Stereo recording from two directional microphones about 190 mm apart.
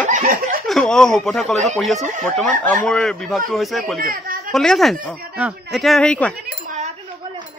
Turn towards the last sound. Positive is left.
turn(degrees=5)  # may be behind; listen again after turning